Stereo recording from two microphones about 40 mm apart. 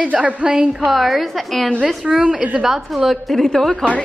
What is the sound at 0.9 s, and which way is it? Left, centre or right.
A woman's voice, centre.